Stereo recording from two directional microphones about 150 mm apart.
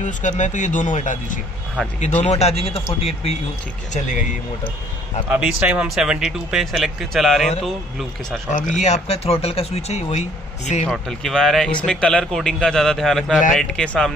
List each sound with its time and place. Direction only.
0.0 s speech: 55° left (ahead or behind)
1.8 s speech: 5° left (ahead or behind)
2.2 s speech: 45° left (ahead or behind)
3.9 s speech: 55° left (ahead or behind)
5.3 s speech: 5° right (ahead or behind)
8.5 s speech: 55° left (ahead or behind)
10.9 s speech: 5° left (ahead or behind)